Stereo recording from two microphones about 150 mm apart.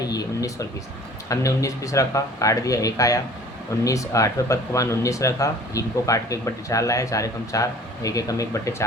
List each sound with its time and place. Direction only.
0.0 s speech: 25° left (ahead or behind)